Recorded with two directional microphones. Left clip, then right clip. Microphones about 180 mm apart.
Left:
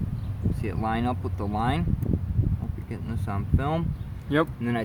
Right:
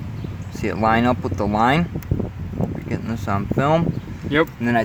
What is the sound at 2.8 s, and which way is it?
Speech, 50° right (ahead or behind).